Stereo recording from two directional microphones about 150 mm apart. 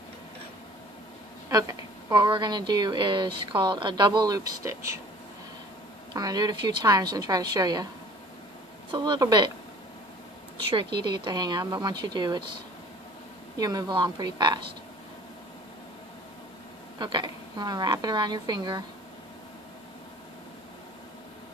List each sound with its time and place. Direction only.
1.5 s a woman's voice: 25° right (ahead or behind)
6.1 s a woman's voice: 25° right (ahead or behind)
8.9 s a woman's voice: 30° right (ahead or behind)
10.7 s a woman's voice: 35° right (ahead or behind)
13.6 s a woman's voice: 25° right (ahead or behind)
17.0 s a woman's voice: 30° right (ahead or behind)